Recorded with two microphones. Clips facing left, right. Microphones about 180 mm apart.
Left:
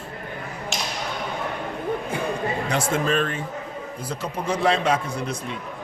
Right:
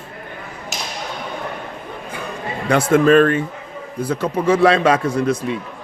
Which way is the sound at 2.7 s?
55° right (ahead or behind).